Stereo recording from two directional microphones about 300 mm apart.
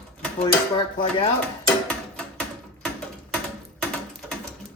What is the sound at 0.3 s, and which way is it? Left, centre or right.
Speech, centre.